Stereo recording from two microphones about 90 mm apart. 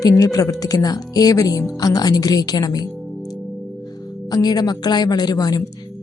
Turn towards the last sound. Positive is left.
turn(degrees=45)  # may be behind; listen again after turning